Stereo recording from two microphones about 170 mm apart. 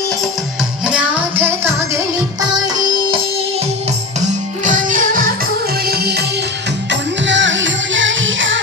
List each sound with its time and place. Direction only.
0.8 s music: 10° right (ahead or behind)
2.4 s music: 20° right (ahead or behind)
4.2 s music: 50° right (ahead or behind)
5.9 s music: 70° right (ahead or behind)
6.9 s music: 90° right